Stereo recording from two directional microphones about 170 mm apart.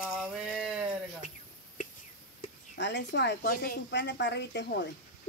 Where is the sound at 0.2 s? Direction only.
Centre (ahead or behind).